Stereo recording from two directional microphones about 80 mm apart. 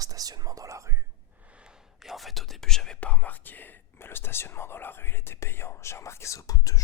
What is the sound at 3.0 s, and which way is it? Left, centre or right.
Whispering, centre.